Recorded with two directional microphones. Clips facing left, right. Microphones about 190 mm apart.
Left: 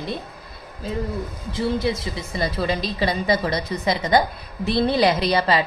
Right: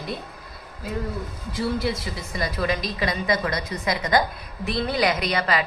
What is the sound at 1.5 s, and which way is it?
A woman's voice, 20° left (ahead or behind).